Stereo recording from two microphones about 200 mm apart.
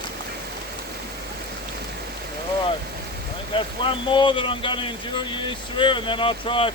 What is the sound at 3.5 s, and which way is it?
Speech, 25° left (ahead or behind).